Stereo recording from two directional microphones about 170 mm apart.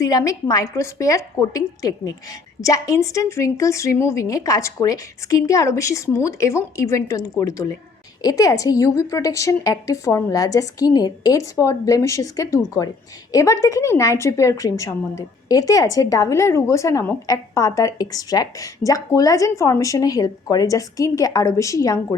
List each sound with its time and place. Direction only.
0.0 s a woman's voice: 20° left (ahead or behind)